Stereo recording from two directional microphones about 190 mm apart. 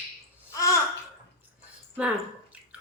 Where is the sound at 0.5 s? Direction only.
15° left (ahead or behind).